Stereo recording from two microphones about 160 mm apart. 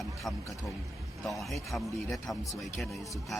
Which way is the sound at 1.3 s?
Centre (ahead or behind).